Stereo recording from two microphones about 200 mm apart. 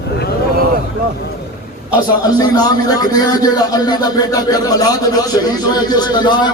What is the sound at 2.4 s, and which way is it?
A man's voice, 20° left (ahead or behind).